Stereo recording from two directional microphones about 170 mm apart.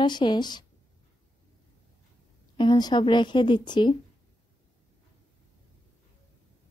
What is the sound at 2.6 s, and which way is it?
Speech, 25° left (ahead or behind).